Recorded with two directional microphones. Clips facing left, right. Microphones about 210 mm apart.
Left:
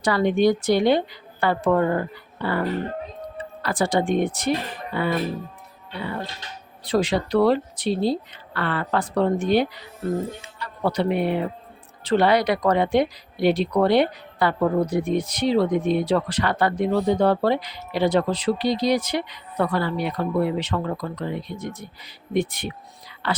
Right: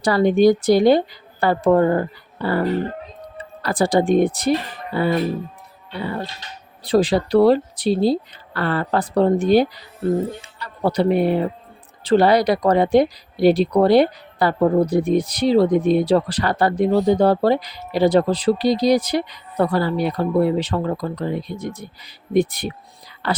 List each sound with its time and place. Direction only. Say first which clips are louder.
0.0 s speech: right 4 dB; 35° right (ahead or behind)